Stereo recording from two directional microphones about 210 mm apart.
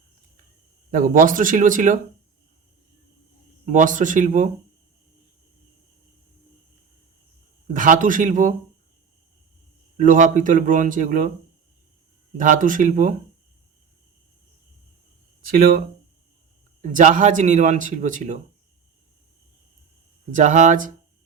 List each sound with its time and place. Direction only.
0.9 s speech: 40° right (ahead or behind)
3.7 s speech: 35° right (ahead or behind)
7.7 s speech: 40° right (ahead or behind)
10.0 s speech: 40° right (ahead or behind)
12.4 s speech: 40° right (ahead or behind)
15.4 s speech: 45° right (ahead or behind)
16.8 s speech: 35° right (ahead or behind)
20.3 s speech: 35° right (ahead or behind)